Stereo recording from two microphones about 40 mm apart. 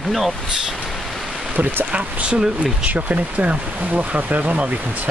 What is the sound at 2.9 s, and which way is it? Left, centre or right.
Speech, right.